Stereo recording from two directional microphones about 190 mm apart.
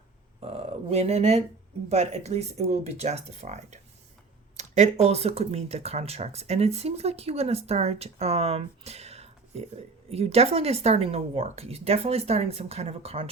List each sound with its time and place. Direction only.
0.3 s speech: 30° right (ahead or behind)